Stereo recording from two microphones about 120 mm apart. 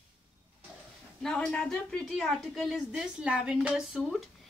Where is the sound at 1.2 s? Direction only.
5° left (ahead or behind).